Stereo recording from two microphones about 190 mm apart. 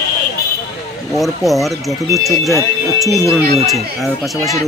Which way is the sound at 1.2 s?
Centre (ahead or behind).